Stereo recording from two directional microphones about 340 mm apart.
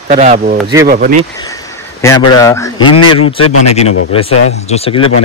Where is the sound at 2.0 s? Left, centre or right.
Centre.